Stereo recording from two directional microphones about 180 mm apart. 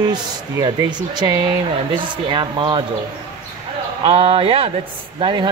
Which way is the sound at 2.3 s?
25° right (ahead or behind).